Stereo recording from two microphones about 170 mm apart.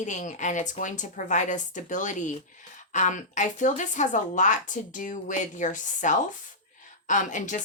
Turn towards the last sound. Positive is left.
turn(degrees=45)  # may be behind; listen again after turning